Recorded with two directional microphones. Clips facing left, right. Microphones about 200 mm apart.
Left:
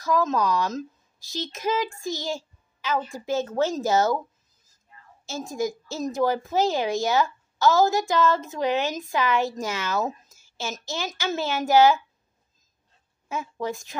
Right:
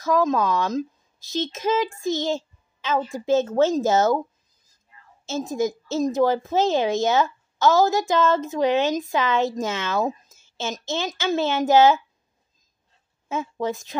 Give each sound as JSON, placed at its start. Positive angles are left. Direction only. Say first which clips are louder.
{"t": 0.0, "sound": "speech", "louder": "right 3 dB", "side_deg": -15}
{"t": 5.2, "sound": "speech", "louder": "right 4 dB", "side_deg": -20}
{"t": 13.3, "sound": "speech", "louder": "right 4 dB", "side_deg": -20}